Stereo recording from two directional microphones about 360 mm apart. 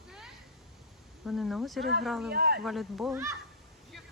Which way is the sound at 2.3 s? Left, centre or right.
Right.